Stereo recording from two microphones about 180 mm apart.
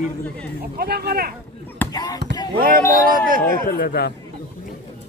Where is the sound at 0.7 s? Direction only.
60° right (ahead or behind).